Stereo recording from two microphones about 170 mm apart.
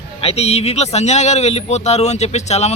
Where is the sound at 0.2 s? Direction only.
35° left (ahead or behind).